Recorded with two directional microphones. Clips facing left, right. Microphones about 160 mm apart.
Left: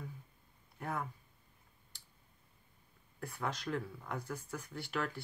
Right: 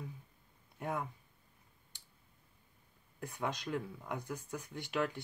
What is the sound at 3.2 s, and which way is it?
Speech, 20° right (ahead or behind).